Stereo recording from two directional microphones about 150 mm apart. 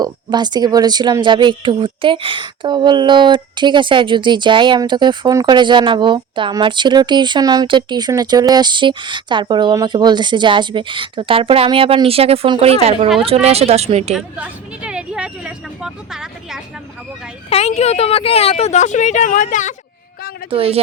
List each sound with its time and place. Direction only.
0.0 s a woman's voice: 30° right (ahead or behind); by 14.1 s 45° right (ahead or behind)
14.1 s speech: 5° right (ahead or behind)
17.5 s speech: 45° left (ahead or behind)
20.5 s a woman's voice: 40° right (ahead or behind)